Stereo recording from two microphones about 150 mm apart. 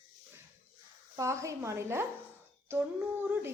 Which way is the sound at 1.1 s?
20° right (ahead or behind).